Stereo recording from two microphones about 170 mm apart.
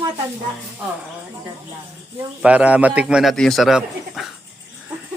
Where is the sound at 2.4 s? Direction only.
5° right (ahead or behind).